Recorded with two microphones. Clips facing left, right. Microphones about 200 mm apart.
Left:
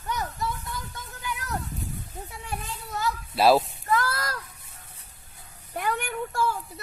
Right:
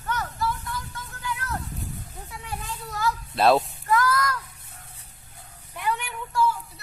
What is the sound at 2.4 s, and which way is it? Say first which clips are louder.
Children playing: right 2 dB; 25° left (ahead or behind).